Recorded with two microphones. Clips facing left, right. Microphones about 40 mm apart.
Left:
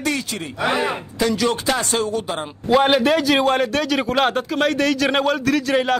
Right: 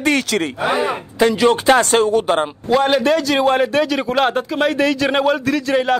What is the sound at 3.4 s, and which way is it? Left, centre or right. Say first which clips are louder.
A man's voice: right 3 dB; centre.